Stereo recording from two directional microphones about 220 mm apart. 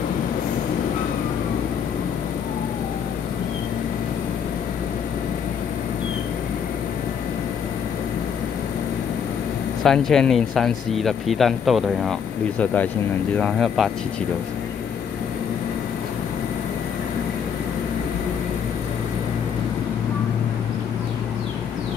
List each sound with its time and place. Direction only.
9.8 s speech: centre (ahead or behind)